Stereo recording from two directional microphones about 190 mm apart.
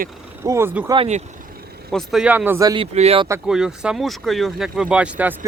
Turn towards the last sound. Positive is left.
turn(degrees=-5)  # may be behind; listen again after turning